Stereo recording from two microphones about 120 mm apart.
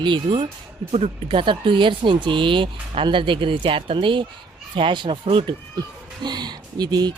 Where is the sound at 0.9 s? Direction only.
50° right (ahead or behind).